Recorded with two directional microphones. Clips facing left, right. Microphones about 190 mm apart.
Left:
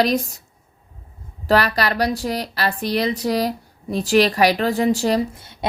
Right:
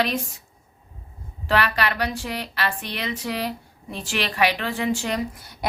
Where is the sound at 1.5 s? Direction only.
40° left (ahead or behind).